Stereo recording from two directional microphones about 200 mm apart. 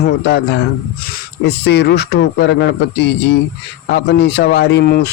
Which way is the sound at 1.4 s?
55° left (ahead or behind).